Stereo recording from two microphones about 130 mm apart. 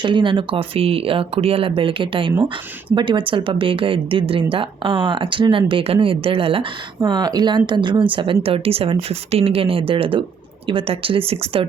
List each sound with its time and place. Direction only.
0.0 s speech: 40° right (ahead or behind)